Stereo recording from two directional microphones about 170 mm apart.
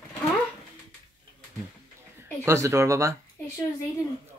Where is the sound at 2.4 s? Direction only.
15° right (ahead or behind).